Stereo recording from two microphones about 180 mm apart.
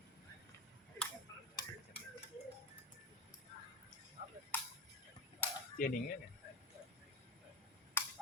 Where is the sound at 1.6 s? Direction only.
30° left (ahead or behind).